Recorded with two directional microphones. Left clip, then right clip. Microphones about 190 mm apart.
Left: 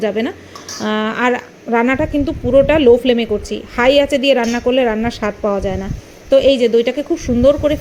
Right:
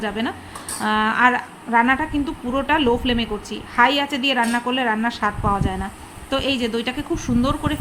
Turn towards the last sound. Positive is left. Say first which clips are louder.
# left 10 dB
turn(degrees=15)  # may be behind; listen again after turning